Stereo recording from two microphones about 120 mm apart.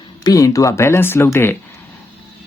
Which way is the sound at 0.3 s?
30° left (ahead or behind).